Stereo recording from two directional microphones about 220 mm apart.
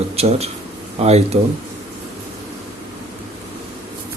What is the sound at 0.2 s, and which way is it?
A man's voice, 30° right (ahead or behind).